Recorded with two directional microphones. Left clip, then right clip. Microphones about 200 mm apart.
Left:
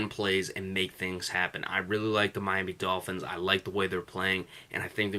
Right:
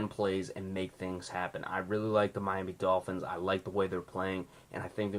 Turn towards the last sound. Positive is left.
turn(degrees=20)  # may be behind; listen again after turning